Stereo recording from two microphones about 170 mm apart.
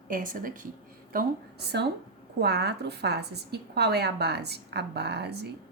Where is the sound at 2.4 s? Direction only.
75° right (ahead or behind).